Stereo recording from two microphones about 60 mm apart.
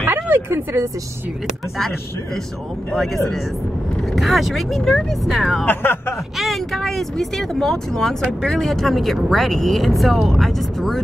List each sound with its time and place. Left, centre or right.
0.0 s a sound: right
4.1 s speech: centre
5.7 s speech: left
6.3 s speech: centre